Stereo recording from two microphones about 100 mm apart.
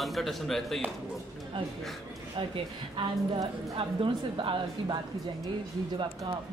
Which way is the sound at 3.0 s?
60° right (ahead or behind).